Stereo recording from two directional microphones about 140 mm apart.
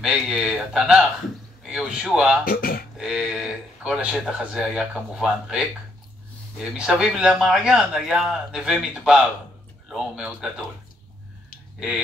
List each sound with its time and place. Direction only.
0.0 s speech: 5° right (ahead or behind)
2.4 s speech: 90° left
3.0 s speech: 5° right (ahead or behind)
6.6 s speech: 5° right (ahead or behind)